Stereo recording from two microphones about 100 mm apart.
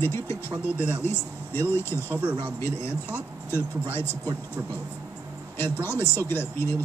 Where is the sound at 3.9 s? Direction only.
25° left (ahead or behind).